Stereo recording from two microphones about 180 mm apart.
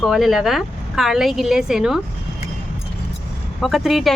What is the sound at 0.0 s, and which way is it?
A woman's voice, centre (ahead or behind).